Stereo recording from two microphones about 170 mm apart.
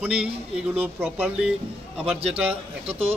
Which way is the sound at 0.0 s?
5° right (ahead or behind).